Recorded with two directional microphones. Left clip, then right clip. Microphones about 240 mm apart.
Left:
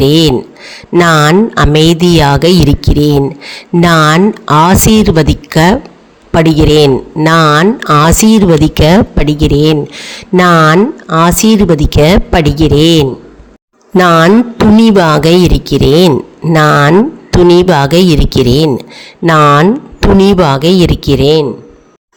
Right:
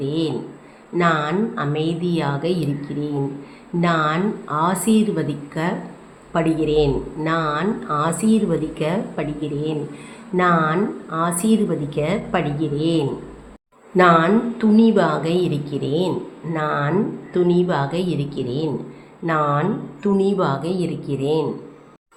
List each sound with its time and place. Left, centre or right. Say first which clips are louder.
0.0 s speech: left 16 dB; left